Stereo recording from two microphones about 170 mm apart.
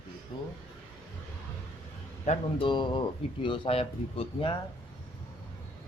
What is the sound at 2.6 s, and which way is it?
Speech, 30° left (ahead or behind).